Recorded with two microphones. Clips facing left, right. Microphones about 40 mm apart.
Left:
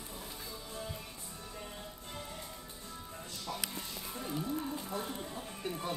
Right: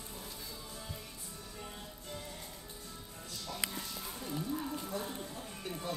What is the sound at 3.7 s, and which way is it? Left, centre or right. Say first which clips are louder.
Music: even; left.